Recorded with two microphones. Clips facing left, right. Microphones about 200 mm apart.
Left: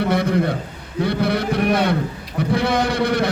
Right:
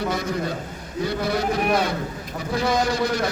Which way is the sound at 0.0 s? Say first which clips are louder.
Left 6 dB; 60° left (ahead or behind).